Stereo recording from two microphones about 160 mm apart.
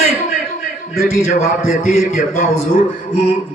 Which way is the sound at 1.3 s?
65° left (ahead or behind).